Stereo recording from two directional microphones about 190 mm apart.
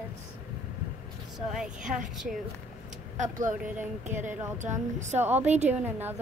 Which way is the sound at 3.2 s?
45° right (ahead or behind).